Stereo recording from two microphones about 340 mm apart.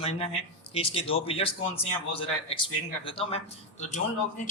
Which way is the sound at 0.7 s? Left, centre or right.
Centre.